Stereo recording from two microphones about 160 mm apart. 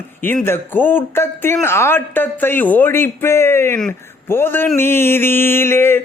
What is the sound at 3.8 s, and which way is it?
Speech, 15° left (ahead or behind).